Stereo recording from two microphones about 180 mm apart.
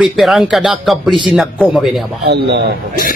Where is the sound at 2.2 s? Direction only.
70° right (ahead or behind).